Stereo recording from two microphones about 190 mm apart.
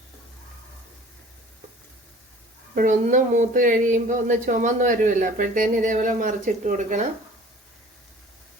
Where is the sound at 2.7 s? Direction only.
40° right (ahead or behind).